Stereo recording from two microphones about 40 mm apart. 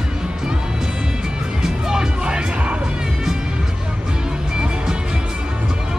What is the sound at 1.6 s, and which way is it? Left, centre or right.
Music, centre.